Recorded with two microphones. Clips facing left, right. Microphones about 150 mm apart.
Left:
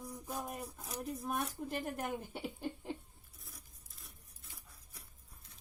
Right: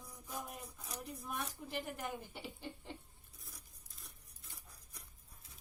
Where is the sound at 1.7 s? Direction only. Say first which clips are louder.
Left 2 dB; 45° left (ahead or behind).